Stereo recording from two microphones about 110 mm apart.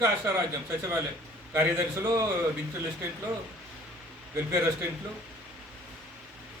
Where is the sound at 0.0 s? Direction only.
25° right (ahead or behind).